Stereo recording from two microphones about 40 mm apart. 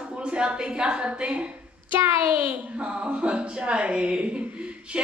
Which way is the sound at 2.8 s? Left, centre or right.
Right.